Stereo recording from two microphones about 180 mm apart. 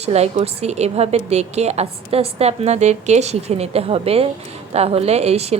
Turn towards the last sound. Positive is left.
turn(degrees=-35)  # may be behind; listen again after turning